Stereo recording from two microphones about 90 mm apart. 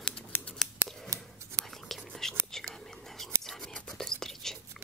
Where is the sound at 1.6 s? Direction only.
5° left (ahead or behind).